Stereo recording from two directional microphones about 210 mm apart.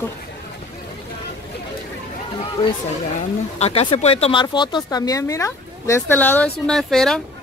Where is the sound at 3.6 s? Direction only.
25° left (ahead or behind).